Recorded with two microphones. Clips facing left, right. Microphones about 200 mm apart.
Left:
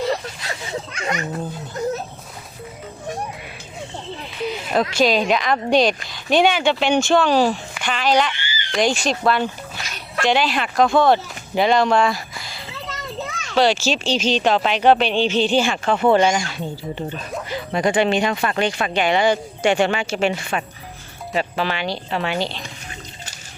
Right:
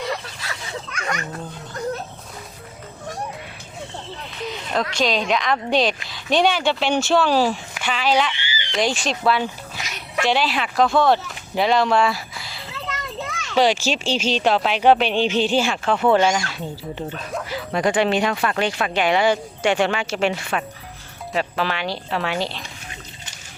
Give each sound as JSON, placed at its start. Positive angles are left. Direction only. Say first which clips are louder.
{"t": 0.0, "sound": "a sound", "louder": "left 5 dB", "side_deg": 30}
{"t": 4.7, "sound": "speech", "louder": "left 4 dB", "side_deg": 10}
{"t": 8.4, "sound": "frog", "louder": "even", "side_deg": 45}
{"t": 8.8, "sound": "speech", "louder": "left 2 dB", "side_deg": 0}
{"t": 13.6, "sound": "speech", "louder": "left 1 dB", "side_deg": -10}